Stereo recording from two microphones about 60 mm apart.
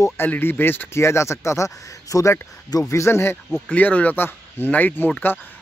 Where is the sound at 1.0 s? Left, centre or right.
Left.